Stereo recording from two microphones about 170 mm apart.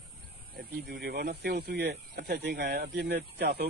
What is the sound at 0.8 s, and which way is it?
Speech, 65° right (ahead or behind).